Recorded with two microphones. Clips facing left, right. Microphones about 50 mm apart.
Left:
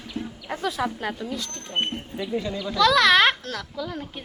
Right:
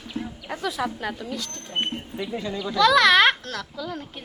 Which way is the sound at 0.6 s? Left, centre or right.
Left.